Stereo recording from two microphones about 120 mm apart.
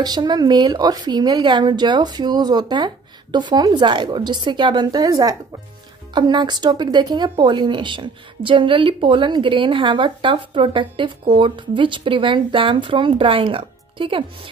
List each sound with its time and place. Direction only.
0.0 s a woman's voice: 35° right (ahead or behind)